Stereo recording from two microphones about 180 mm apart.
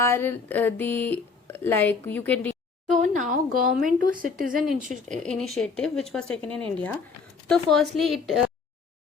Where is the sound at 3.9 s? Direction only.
50° right (ahead or behind).